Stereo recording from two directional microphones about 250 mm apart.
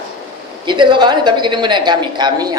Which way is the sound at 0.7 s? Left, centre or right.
Centre.